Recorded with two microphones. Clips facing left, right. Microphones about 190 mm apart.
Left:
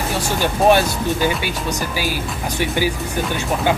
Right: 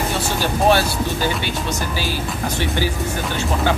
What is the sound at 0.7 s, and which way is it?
Speech, 15° left (ahead or behind).